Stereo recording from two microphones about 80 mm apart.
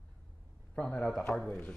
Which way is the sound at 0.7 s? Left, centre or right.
Centre.